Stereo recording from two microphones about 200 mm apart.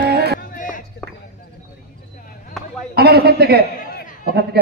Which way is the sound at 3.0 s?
50° right (ahead or behind).